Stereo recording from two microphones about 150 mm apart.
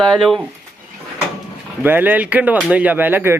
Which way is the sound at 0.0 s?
5° left (ahead or behind).